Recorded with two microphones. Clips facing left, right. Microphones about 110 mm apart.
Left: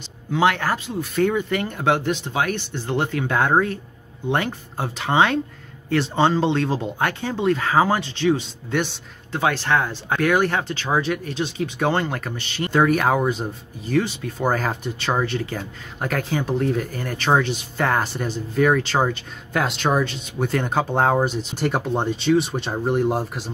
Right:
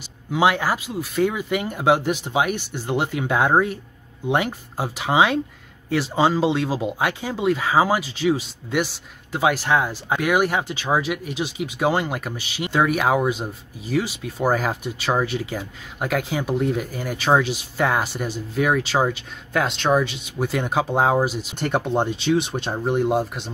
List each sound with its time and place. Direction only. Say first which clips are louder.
0.3 s speech: even; 10° right (ahead or behind)